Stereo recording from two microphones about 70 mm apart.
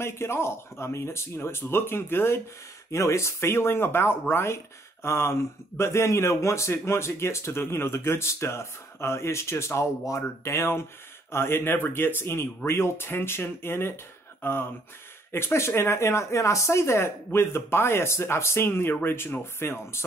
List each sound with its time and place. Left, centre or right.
0.0 s a man's voice: left